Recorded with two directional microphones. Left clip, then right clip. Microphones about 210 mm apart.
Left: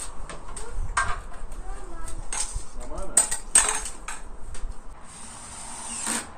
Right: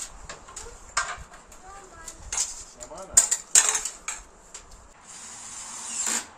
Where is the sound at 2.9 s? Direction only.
15° right (ahead or behind).